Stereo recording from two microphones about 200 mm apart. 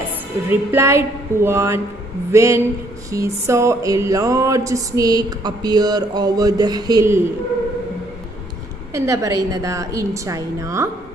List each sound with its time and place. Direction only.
0.5 s speech: 10° right (ahead or behind)
8.9 s speech: 15° right (ahead or behind)